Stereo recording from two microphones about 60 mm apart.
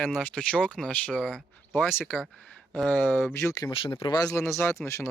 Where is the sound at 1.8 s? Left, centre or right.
Left.